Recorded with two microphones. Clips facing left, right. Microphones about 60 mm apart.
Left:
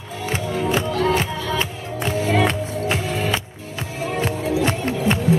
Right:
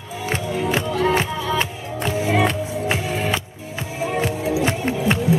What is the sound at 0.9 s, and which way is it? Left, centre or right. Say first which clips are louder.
Music: right 1 dB; centre.